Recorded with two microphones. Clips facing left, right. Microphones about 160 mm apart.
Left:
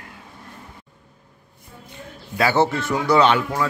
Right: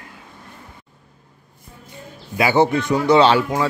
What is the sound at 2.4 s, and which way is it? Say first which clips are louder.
Speech: right 3 dB; 15° right (ahead or behind).